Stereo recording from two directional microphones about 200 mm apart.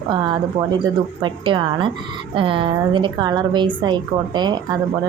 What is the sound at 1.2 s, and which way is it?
A woman's voice, 25° right (ahead or behind).